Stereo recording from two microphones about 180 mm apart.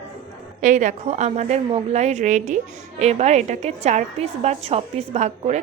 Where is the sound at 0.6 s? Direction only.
45° right (ahead or behind).